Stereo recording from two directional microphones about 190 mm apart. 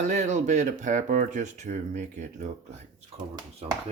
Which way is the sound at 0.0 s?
35° right (ahead or behind).